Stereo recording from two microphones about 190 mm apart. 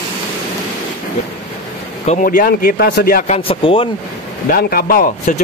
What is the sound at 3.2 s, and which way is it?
Speech, 30° left (ahead or behind).